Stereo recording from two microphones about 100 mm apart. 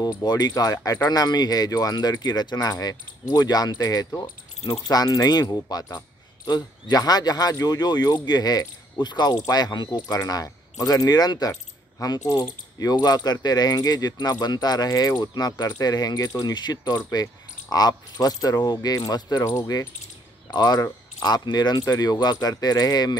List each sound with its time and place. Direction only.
0.2 s speech: 40° left (ahead or behind)
12.0 s mechanisms: 35° left (ahead or behind)
12.9 s speech: 40° left (ahead or behind)
19.4 s speech: 30° left (ahead or behind)
20.5 s speech: 40° left (ahead or behind)